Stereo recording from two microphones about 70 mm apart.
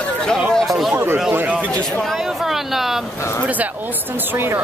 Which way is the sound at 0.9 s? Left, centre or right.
Right.